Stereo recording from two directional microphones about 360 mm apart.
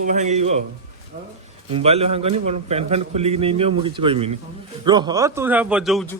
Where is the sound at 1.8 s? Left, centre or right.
Centre.